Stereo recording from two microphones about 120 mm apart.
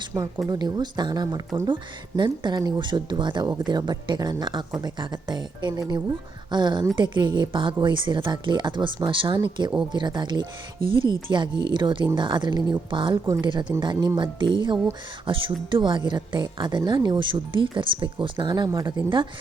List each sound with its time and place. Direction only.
0.4 s speech: 35° right (ahead or behind)